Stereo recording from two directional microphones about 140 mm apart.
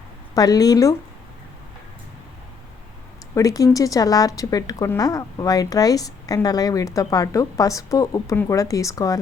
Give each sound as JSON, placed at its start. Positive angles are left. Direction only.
{"t": 0.3, "sound": "a woman's voice", "side_deg": 25}
{"t": 3.3, "sound": "a woman's voice", "side_deg": 25}